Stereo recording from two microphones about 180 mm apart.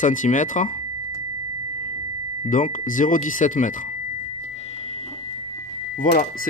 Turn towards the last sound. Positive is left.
turn(degrees=50)  # may be behind; listen again after turning